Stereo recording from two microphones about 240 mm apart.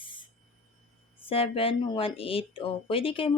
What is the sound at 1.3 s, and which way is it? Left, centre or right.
Speech, left.